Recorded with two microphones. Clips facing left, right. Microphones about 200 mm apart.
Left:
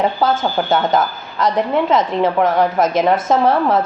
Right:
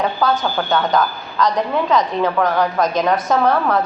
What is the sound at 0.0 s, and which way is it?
Speech, 25° left (ahead or behind).